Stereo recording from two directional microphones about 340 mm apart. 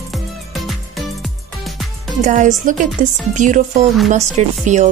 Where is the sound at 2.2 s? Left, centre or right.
Right.